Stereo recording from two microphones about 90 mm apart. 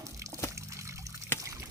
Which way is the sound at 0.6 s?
35° right (ahead or behind).